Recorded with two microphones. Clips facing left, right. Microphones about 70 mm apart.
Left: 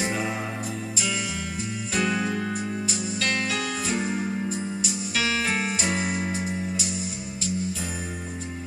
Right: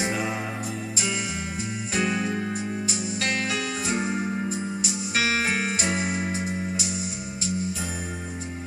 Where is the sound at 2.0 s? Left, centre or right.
Right.